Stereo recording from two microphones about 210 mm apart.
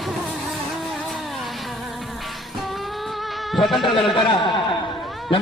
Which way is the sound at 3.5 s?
Centre (ahead or behind).